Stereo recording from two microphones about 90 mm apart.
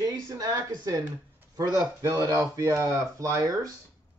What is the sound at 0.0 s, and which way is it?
Speech, 40° right (ahead or behind).